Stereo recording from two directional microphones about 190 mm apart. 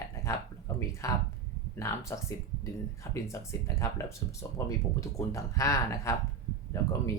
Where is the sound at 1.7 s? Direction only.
15° left (ahead or behind).